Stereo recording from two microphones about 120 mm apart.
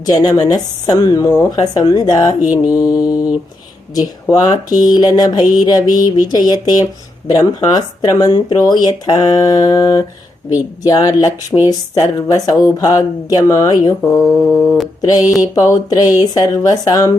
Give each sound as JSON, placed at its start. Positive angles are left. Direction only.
{"t": 0.0, "sound": "speech", "side_deg": 35}
{"t": 2.5, "sound": "mantra", "side_deg": -10}
{"t": 3.9, "sound": "speech", "side_deg": 35}